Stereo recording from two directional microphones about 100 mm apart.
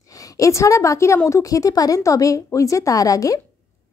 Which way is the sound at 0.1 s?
35° left (ahead or behind).